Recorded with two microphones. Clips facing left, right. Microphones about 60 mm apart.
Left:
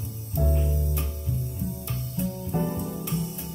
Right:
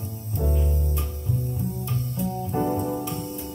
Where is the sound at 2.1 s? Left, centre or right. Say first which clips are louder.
Right 1 dB; right.